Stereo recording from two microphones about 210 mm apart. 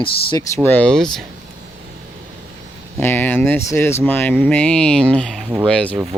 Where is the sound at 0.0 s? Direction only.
20° left (ahead or behind); by 1.2 s 5° left (ahead or behind).